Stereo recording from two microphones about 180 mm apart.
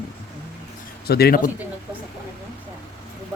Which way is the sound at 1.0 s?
60° left (ahead or behind).